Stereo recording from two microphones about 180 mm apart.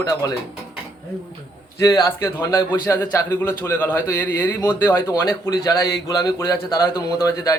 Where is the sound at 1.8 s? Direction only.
15° left (ahead or behind).